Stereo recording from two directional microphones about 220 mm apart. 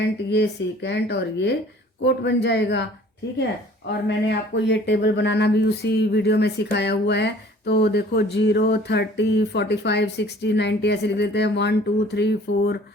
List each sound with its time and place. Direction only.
0.3 s speech: 50° left (ahead or behind)
3.8 s speech: 50° left (ahead or behind)